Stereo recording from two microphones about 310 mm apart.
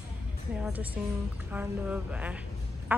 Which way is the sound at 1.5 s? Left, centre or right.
Centre.